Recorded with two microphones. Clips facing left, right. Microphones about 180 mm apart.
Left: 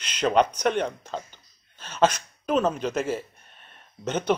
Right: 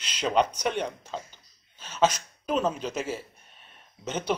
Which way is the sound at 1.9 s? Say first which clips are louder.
Left 2 dB; 50° left (ahead or behind).